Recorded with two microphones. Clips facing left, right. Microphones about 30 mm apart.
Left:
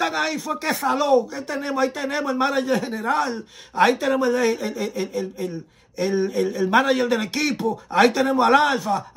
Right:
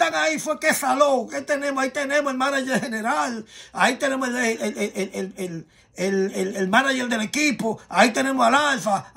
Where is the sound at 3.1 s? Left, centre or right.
Left.